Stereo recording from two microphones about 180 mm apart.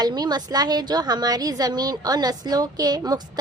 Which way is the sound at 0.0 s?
25° right (ahead or behind).